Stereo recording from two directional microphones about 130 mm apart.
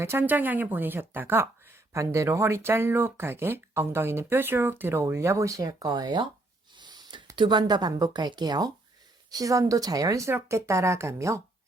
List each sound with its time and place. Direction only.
0.0 s speech: 15° right (ahead or behind); by 6.2 s 35° right (ahead or behind)
6.7 s a sound: 35° right (ahead or behind)
7.3 s speech: 35° right (ahead or behind)